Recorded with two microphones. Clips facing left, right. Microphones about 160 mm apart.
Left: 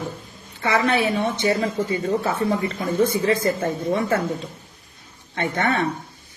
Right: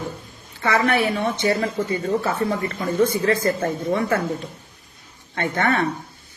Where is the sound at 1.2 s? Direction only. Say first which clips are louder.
Even; 20° left (ahead or behind).